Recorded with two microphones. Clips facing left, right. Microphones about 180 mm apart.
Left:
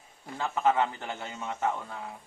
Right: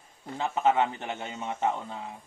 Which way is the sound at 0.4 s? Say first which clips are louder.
Right 1 dB; 20° right (ahead or behind).